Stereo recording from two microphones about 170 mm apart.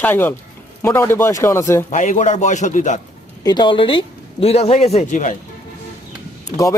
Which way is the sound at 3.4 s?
25° left (ahead or behind).